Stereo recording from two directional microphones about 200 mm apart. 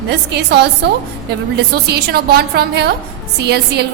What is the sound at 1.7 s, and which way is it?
A woman's voice, 50° right (ahead or behind).